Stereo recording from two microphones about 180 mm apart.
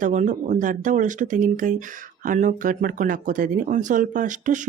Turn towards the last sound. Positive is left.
turn(degrees=-45)  # may be behind; listen again after turning